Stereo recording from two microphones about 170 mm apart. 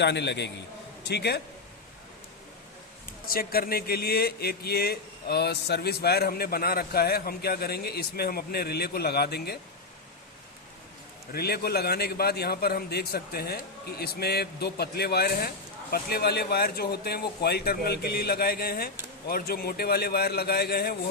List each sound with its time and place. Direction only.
0.0 s a man's voice: 90° left
1.0 s speech: 75° left (ahead or behind)
3.2 s speech: 60° left (ahead or behind)
11.3 s a man's voice: 65° left (ahead or behind)